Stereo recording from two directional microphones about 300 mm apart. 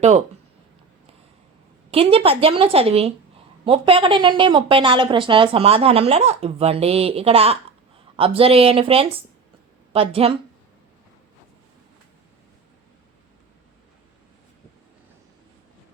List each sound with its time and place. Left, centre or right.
1.9 s a woman's voice: centre